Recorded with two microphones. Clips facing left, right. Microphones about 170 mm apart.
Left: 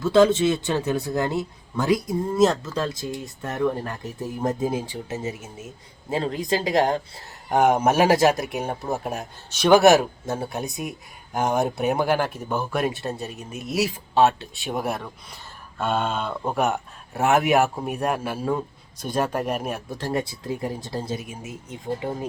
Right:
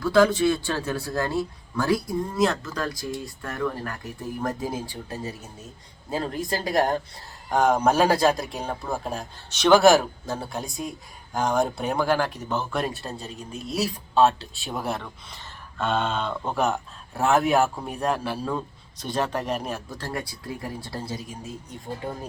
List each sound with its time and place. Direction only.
0.0 s a man's voice: 25° left (ahead or behind); by 17.4 s centre (ahead or behind)
17.5 s speech: 15° left (ahead or behind)
18.0 s speech: 5° left (ahead or behind)
19.9 s a man's voice: 20° left (ahead or behind)